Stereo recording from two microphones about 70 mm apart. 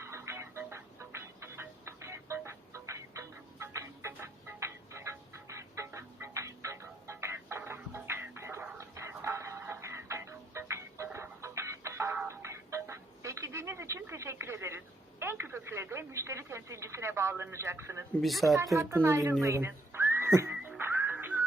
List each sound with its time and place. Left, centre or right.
0.0 s music: right
15.2 s speech: right
18.2 s speech: centre
18.5 s speech: right
19.4 s music: right